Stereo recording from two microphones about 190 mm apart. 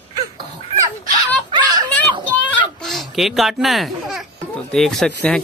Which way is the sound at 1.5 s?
20° right (ahead or behind).